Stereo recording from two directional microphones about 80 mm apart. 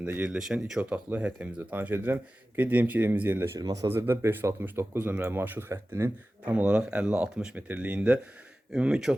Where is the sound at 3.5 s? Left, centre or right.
Right.